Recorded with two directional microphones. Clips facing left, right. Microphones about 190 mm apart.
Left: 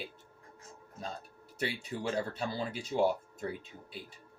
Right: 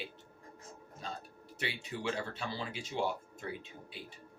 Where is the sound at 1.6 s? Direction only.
40° left (ahead or behind).